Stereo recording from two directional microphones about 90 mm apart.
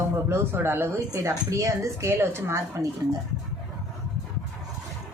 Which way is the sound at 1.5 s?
35° right (ahead or behind).